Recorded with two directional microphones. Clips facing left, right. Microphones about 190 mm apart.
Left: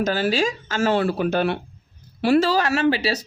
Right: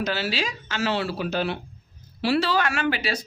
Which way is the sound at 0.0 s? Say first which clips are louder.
Left 6 dB; 45° left (ahead or behind).